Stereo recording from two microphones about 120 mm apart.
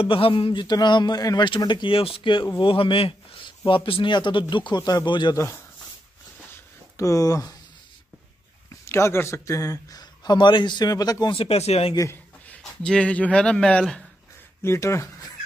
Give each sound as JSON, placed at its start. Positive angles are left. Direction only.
{"t": 0.0, "sound": "speech", "side_deg": 50}
{"t": 5.3, "sound": "speech", "side_deg": 25}
{"t": 7.0, "sound": "speech", "side_deg": 30}
{"t": 8.6, "sound": "speech", "side_deg": 20}
{"t": 11.3, "sound": "speech", "side_deg": 60}
{"t": 12.8, "sound": "speech", "side_deg": 10}
{"t": 14.6, "sound": "speech", "side_deg": 20}